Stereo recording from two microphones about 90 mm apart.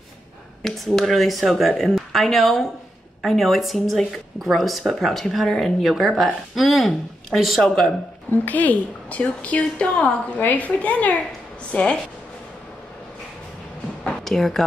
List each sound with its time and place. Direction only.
0.6 s speech: 5° left (ahead or behind)
8.5 s a woman's voice: 20° left (ahead or behind)
14.0 s a sound: 5° left (ahead or behind)